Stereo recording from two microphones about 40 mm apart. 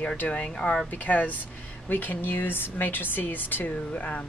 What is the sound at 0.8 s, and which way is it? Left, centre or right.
Speech, left.